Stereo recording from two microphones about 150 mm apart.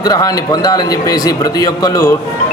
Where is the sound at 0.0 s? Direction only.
25° left (ahead or behind).